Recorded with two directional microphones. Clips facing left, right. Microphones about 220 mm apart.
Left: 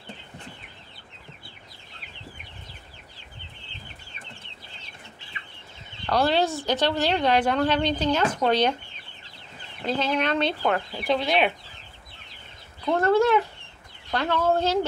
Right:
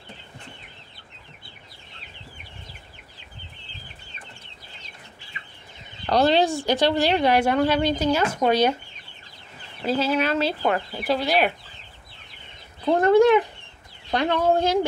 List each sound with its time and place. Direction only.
6.0 s a woman's voice: 20° right (ahead or behind)
9.8 s speech: 5° right (ahead or behind)
12.9 s a woman's voice: 15° right (ahead or behind)